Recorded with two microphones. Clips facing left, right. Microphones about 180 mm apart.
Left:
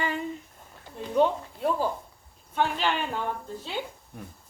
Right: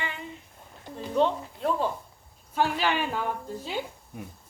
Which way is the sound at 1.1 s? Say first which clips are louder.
Left 1 dB; 5° left (ahead or behind).